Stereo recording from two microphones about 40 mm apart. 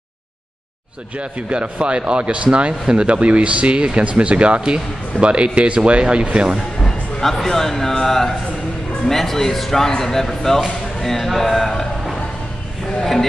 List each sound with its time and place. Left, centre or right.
1.1 s speech: right
6.8 s a sound: centre
8.0 s speech: centre
13.0 s speech: centre